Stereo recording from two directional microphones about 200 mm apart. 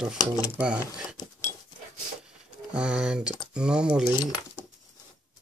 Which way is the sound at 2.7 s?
5° right (ahead or behind).